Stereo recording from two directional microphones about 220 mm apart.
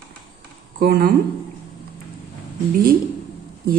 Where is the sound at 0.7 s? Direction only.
40° right (ahead or behind).